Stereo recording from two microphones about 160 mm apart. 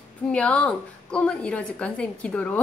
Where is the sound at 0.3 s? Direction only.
10° left (ahead or behind).